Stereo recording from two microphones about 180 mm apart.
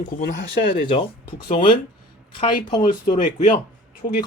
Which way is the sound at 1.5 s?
30° left (ahead or behind).